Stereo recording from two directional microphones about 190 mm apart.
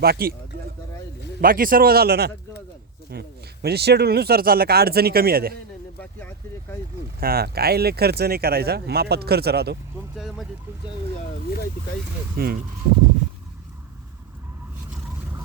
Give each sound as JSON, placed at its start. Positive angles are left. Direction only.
{"t": 0.0, "sound": "speech", "side_deg": -55}
{"t": 1.4, "sound": "a man's voice", "side_deg": -50}
{"t": 6.0, "sound": "vehicle", "side_deg": 10}
{"t": 7.2, "sound": "speech", "side_deg": -50}
{"t": 10.2, "sound": "a sound", "side_deg": 0}
{"t": 12.4, "sound": "a man's voice", "side_deg": -55}